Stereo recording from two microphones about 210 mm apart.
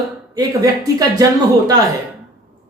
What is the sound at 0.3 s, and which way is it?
A man's voice, 15° right (ahead or behind).